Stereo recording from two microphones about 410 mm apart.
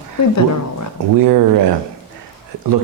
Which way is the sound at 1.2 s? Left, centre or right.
Right.